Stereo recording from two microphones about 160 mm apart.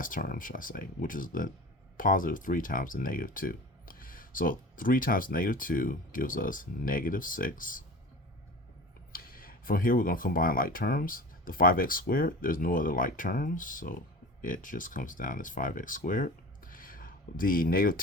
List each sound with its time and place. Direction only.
0.0 s speech: 60° left (ahead or behind)
9.1 s speech: 65° left (ahead or behind)